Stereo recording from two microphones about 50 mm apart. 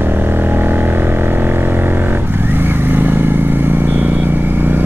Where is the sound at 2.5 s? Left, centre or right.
Right.